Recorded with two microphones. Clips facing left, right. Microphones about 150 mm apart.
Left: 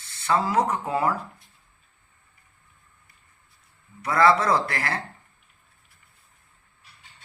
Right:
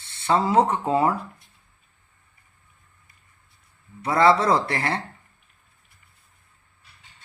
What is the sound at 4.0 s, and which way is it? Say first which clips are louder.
Speech: right 1 dB; 25° right (ahead or behind).